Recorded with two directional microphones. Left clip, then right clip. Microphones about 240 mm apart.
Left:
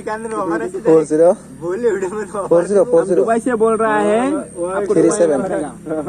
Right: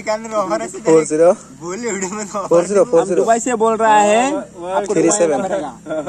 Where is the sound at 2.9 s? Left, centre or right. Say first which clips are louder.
Even; centre.